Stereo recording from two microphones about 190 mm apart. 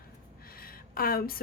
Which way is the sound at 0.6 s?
50° left (ahead or behind).